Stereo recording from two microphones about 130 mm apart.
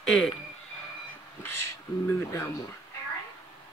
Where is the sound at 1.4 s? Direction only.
20° left (ahead or behind).